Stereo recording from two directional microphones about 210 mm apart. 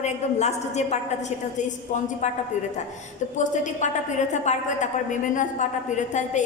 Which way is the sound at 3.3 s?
35° left (ahead or behind).